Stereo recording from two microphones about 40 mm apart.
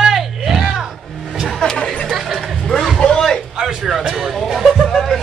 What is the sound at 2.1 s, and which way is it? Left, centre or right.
Music, centre.